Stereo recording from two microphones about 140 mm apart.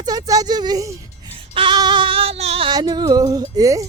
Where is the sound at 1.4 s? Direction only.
40° right (ahead or behind).